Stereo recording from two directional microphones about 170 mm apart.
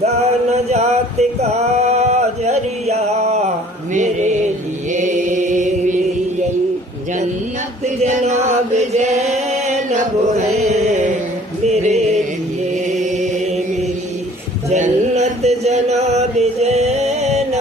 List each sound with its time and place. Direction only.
0.0 s music: 40° right (ahead or behind)
1.4 s a sound: 40° right (ahead or behind)
4.9 s mantra: 45° right (ahead or behind)
8.0 s chant: 45° right (ahead or behind)
10.7 s mantra: 40° right (ahead or behind)
11.6 s music: 40° right (ahead or behind)
12.9 s chant: 45° right (ahead or behind)
14.7 s chant: 40° right (ahead or behind)